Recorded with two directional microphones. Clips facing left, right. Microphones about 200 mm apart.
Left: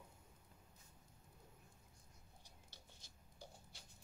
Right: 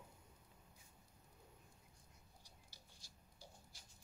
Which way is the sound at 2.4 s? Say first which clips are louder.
Left 2 dB; 20° left (ahead or behind).